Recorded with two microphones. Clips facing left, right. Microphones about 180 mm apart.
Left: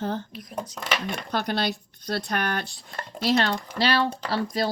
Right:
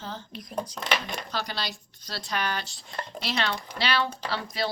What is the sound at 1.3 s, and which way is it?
Speech, 55° left (ahead or behind).